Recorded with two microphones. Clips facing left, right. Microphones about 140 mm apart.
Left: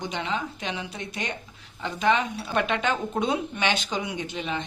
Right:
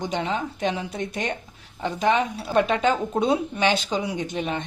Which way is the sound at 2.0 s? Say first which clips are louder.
Right 1 dB; 15° right (ahead or behind).